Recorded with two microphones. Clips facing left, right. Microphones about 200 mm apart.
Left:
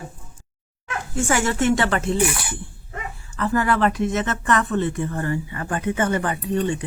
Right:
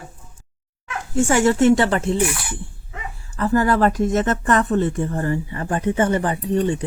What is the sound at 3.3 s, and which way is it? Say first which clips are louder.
Speech: right 3 dB; 35° right (ahead or behind).